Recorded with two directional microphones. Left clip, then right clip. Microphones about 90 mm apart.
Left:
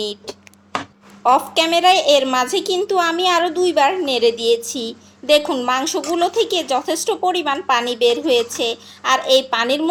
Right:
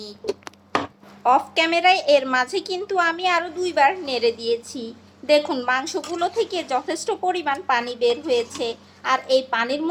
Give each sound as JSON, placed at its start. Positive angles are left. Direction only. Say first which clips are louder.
{"t": 0.0, "sound": "a woman's voice", "louder": "left 3 dB", "side_deg": 50}